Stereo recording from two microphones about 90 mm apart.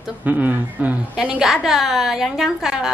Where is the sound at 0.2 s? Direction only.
20° right (ahead or behind).